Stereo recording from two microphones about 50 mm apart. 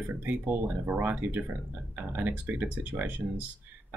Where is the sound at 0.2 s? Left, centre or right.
Right.